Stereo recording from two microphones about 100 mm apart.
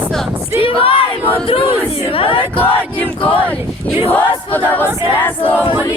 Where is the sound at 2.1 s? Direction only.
65° left (ahead or behind).